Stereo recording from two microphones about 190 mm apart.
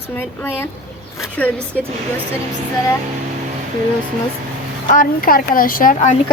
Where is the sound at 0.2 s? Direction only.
10° left (ahead or behind).